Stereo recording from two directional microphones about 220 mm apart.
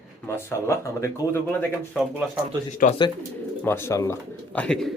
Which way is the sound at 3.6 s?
10° left (ahead or behind).